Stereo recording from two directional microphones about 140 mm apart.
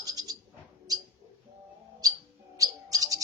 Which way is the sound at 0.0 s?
25° right (ahead or behind).